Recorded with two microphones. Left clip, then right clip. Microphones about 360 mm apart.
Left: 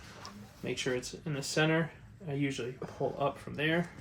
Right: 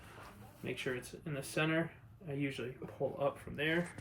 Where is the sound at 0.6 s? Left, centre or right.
Centre.